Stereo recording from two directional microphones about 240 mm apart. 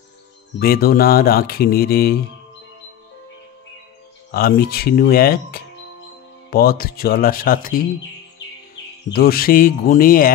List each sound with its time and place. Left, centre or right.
0.6 s speech: left
4.3 s speech: left
9.1 s speech: left